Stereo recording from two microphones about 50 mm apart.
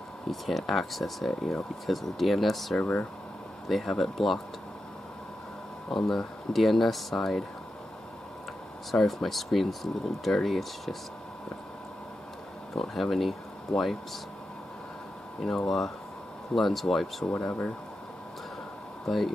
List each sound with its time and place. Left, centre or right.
0.3 s speech: centre
2.8 s speech: left
3.6 s speech: centre
5.9 s speech: centre
9.0 s speech: centre
12.7 s speech: centre
15.4 s speech: centre
17.4 s speech: left
19.0 s speech: centre